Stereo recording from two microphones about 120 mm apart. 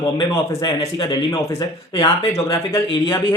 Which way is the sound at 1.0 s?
40° left (ahead or behind).